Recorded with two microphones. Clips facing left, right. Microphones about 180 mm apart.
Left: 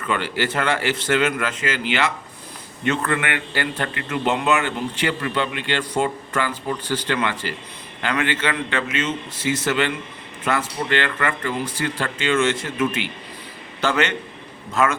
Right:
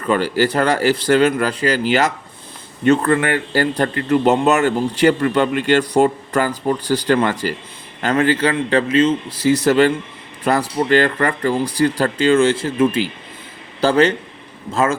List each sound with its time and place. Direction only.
0.0 s a man's voice: 40° right (ahead or behind)